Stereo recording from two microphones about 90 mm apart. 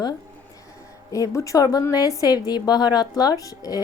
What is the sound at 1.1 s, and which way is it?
A woman's voice, 35° left (ahead or behind).